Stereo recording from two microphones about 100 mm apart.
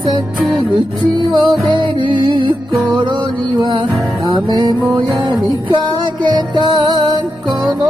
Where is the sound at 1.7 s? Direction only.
50° right (ahead or behind).